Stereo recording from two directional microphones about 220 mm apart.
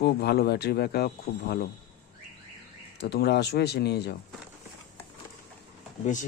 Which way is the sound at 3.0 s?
50° left (ahead or behind).